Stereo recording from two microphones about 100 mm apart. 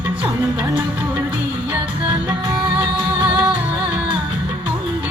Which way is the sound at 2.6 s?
15° right (ahead or behind).